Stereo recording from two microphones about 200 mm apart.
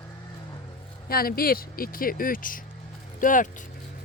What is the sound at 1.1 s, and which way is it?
Speech, 50° left (ahead or behind).